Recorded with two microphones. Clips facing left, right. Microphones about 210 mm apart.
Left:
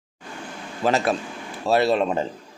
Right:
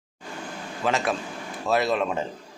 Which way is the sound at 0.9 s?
40° left (ahead or behind).